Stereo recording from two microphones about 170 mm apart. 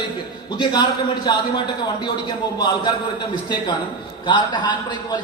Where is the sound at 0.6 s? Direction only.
25° left (ahead or behind).